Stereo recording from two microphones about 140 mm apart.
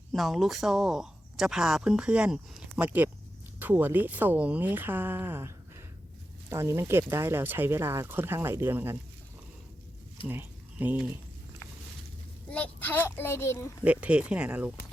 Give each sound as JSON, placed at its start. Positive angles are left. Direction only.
{"t": 0.1, "sound": "speech", "side_deg": 0}
{"t": 10.2, "sound": "speech", "side_deg": -15}
{"t": 12.5, "sound": "a child's voice", "side_deg": 10}
{"t": 13.8, "sound": "speech", "side_deg": -10}